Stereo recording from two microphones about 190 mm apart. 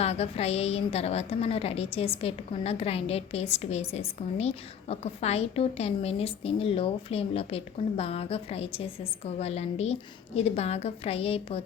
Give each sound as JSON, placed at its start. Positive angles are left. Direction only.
{"t": 0.0, "sound": "a woman's voice", "side_deg": 35}